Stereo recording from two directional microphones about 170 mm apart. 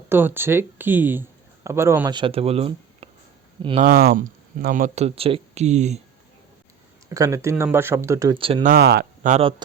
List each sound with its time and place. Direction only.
0.1 s speech: 15° right (ahead or behind)
2.1 s speech: 35° right (ahead or behind)
3.8 s speech: 60° right (ahead or behind); by 6.0 s 40° right (ahead or behind)
7.1 s speech: 20° right (ahead or behind)
8.4 s speech: 30° right (ahead or behind)
8.7 s speech: 70° right (ahead or behind)
9.4 s speech: 30° right (ahead or behind)